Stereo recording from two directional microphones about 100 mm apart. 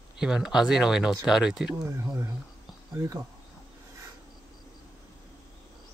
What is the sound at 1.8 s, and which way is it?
Speech, 30° right (ahead or behind).